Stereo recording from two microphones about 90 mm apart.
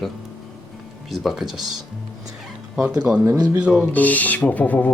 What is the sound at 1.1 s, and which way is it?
Speech, centre (ahead or behind).